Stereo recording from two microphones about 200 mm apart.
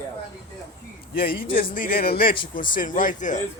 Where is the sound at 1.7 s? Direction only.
45° left (ahead or behind).